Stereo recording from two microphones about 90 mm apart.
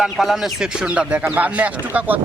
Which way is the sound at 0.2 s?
Centre (ahead or behind).